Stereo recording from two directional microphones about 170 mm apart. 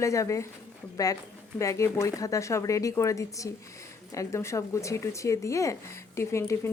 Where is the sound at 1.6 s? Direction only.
15° left (ahead or behind).